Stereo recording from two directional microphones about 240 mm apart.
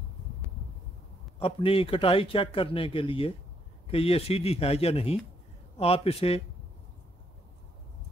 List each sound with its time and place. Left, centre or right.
1.4 s speech: left